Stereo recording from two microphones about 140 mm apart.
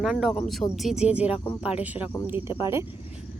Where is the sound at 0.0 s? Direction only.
Centre (ahead or behind).